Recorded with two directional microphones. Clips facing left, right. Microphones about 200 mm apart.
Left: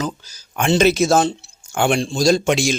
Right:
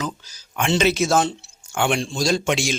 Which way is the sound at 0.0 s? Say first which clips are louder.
Left 3 dB; 40° left (ahead or behind).